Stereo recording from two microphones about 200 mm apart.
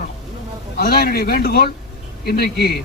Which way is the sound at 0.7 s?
50° left (ahead or behind).